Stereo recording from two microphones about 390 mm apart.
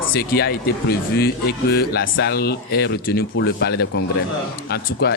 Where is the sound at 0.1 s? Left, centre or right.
Left.